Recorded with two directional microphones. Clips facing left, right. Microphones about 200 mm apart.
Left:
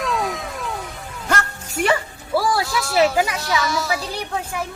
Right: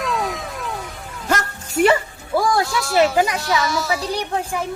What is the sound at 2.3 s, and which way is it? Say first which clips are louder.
Speech: right 1 dB; centre (ahead or behind).